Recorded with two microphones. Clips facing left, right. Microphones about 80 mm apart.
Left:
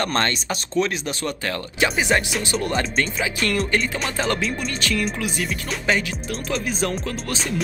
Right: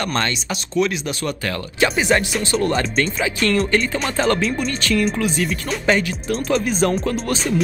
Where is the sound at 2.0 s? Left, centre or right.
Centre.